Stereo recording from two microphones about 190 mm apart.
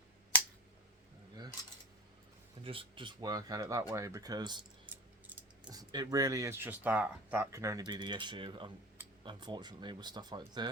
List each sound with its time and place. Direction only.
2.6 s speech: 30° right (ahead or behind)
5.6 s speech: 20° right (ahead or behind)